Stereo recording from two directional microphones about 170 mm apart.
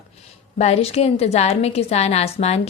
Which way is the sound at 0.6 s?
35° left (ahead or behind).